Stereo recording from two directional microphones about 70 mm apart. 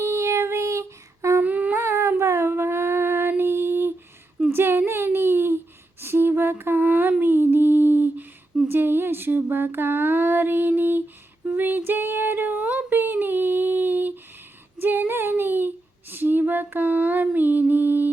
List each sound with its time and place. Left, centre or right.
0.0 s child singing: right
1.4 s humming: right
1.8 s a sound: right
6.0 s lullaby: right
7.2 s a sound: right
11.4 s female singing: right
12.5 s humming: right
14.8 s female singing: right